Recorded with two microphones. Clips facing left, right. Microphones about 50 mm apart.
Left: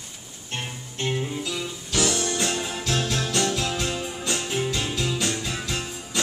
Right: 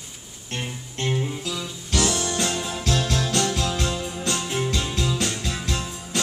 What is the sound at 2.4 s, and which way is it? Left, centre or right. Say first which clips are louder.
Music: right 1 dB; left.